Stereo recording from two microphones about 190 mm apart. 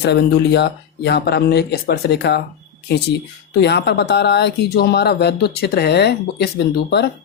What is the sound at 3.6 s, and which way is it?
Speech, 65° left (ahead or behind).